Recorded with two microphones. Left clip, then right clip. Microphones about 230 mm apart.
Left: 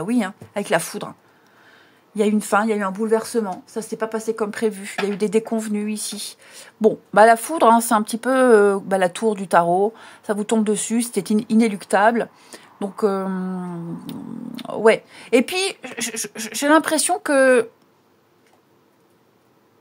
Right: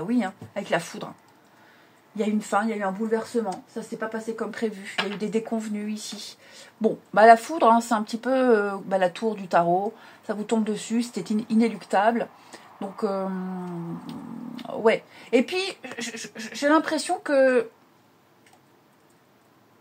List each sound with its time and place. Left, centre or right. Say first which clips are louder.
0.0 s speech: left 4 dB; left
2.1 s speech: left 6 dB; left